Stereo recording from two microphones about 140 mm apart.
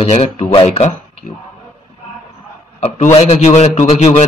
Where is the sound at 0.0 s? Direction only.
50° left (ahead or behind).